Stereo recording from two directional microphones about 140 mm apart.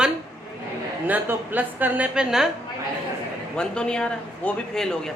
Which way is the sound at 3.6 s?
5° left (ahead or behind).